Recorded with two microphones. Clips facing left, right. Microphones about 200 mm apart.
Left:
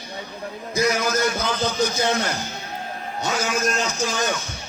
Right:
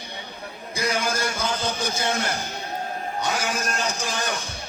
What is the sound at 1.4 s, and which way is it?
Speech, 10° right (ahead or behind).